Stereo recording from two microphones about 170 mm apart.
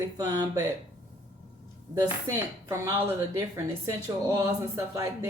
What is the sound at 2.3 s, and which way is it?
A woman's voice, 20° right (ahead or behind).